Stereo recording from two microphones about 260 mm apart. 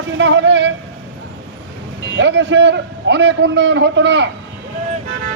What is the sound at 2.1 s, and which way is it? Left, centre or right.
A man's voice, right.